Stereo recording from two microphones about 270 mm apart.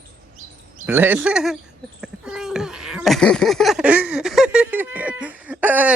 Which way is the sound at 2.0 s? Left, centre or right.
Centre.